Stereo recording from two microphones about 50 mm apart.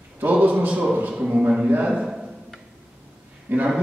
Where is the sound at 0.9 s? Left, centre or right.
Right.